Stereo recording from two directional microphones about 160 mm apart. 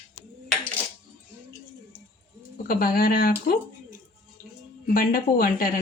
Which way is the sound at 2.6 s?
65° left (ahead or behind).